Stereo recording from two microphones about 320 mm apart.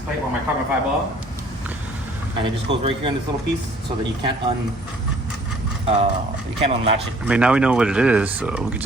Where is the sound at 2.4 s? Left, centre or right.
Centre.